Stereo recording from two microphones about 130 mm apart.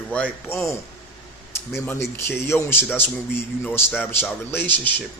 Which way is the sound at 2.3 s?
20° left (ahead or behind).